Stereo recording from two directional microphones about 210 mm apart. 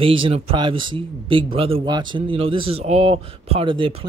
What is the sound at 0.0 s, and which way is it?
Speech, 25° right (ahead or behind).